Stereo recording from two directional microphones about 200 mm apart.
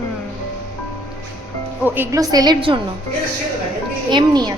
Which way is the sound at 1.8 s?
10° right (ahead or behind).